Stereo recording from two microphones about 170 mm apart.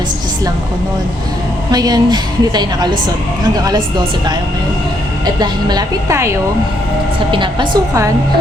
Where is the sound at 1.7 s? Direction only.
25° right (ahead or behind).